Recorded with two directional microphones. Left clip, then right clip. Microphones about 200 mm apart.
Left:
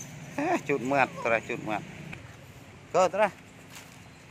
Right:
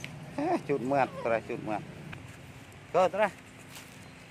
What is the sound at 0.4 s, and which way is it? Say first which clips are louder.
Speech: left 2 dB; centre (ahead or behind).